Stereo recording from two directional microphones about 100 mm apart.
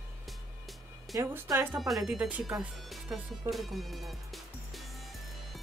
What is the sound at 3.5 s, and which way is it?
Music, centre (ahead or behind).